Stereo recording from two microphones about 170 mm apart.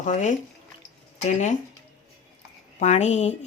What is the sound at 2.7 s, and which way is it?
Speech, 45° left (ahead or behind).